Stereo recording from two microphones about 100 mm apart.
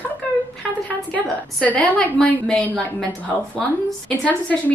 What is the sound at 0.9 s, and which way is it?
Speech, 15° left (ahead or behind).